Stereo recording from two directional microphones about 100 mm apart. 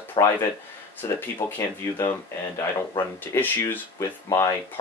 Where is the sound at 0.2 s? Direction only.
45° left (ahead or behind).